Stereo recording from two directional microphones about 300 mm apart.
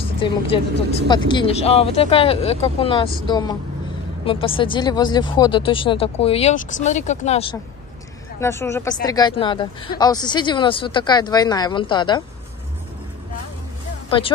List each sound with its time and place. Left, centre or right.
0.0 s a woman's voice: centre
8.4 s speech: centre
14.1 s speech: centre